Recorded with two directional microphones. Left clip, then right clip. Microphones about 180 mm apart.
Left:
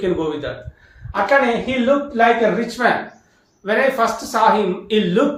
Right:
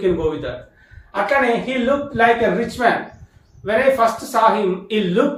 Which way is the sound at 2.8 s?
20° left (ahead or behind).